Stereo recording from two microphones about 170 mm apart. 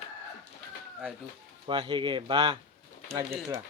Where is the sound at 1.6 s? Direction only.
30° right (ahead or behind).